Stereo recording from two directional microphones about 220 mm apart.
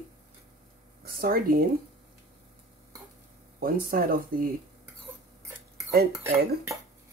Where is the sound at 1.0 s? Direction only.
40° right (ahead or behind).